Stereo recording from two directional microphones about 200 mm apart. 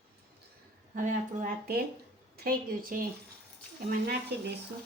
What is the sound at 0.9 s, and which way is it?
A woman's voice, 40° right (ahead or behind).